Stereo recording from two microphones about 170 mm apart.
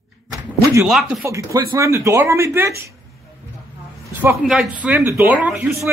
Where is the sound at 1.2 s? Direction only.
20° right (ahead or behind).